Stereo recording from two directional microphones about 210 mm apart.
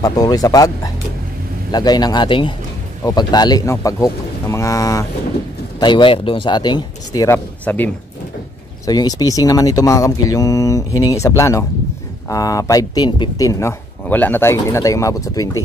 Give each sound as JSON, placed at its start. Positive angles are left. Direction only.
{"t": 0.0, "sound": "speech", "side_deg": 15}